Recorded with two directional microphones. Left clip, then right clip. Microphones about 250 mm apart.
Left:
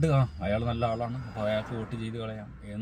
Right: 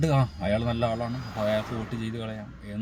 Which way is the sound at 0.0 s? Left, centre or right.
Centre.